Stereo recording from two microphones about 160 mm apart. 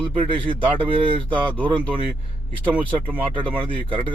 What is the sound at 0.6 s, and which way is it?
Speech, 30° right (ahead or behind).